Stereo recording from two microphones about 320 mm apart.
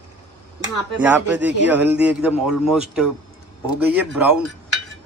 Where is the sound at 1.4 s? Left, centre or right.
Right.